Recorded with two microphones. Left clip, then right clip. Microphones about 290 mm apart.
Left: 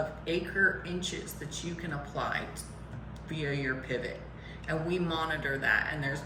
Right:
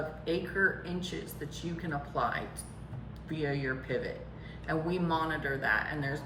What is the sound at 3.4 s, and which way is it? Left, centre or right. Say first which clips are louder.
Speech: left 1 dB; right.